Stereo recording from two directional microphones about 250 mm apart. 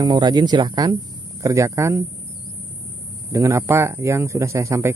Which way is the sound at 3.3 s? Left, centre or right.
Centre.